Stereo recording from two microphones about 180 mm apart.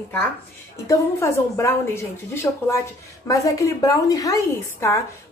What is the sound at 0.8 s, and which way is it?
A woman's voice, 15° left (ahead or behind).